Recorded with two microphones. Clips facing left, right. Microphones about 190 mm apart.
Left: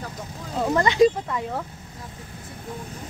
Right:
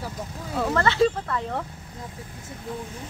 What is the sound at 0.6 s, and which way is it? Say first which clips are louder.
Speech: left 3 dB; 15° left (ahead or behind).